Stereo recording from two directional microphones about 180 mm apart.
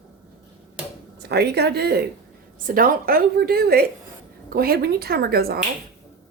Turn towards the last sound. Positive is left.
turn(degrees=-60)  # may be behind; listen again after turning